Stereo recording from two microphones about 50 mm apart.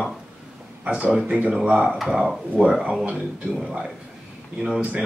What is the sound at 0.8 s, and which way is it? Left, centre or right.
Speech, right.